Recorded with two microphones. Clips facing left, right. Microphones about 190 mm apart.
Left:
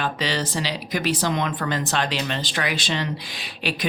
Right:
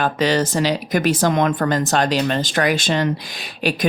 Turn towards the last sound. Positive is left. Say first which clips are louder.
# right 7 dB
turn(degrees=-45)  # may be behind; listen again after turning